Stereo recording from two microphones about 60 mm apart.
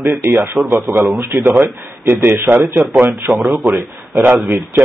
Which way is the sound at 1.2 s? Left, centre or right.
Right.